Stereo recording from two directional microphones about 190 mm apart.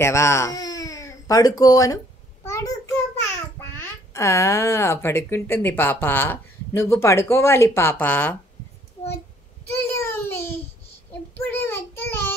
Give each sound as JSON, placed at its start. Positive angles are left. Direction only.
{"t": 0.0, "sound": "speech", "side_deg": 15}
{"t": 2.4, "sound": "child singing", "side_deg": 15}
{"t": 3.5, "sound": "a child's voice", "side_deg": 15}
{"t": 9.9, "sound": "a sound", "side_deg": 10}
{"t": 11.3, "sound": "child singing", "side_deg": 10}